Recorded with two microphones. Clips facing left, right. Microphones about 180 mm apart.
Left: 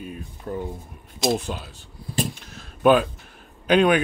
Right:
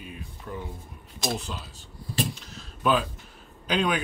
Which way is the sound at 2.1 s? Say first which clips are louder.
Left 2 dB; 55° left (ahead or behind).